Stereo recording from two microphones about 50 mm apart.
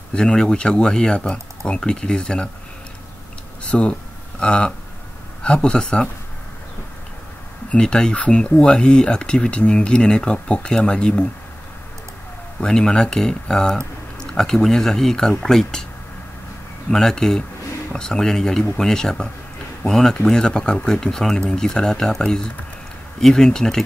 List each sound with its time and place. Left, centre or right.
0.1 s speech: centre
3.6 s speech: left
7.7 s speech: centre
12.5 s speech: centre
16.9 s speech: centre